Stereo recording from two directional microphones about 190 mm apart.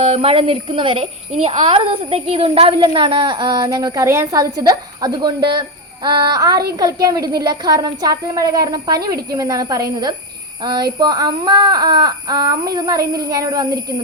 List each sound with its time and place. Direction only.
0.0 s a woman's voice: 30° right (ahead or behind)